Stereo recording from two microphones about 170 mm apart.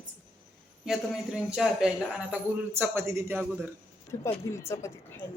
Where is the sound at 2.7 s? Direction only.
15° right (ahead or behind).